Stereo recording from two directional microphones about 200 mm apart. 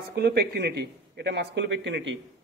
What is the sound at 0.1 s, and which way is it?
A man's voice, 55° right (ahead or behind).